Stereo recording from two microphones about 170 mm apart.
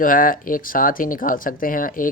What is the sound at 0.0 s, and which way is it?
Speech, 55° left (ahead or behind).